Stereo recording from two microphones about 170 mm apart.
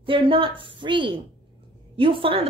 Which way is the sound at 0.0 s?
30° right (ahead or behind).